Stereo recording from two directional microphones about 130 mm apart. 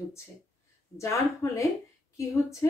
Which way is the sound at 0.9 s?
25° left (ahead or behind).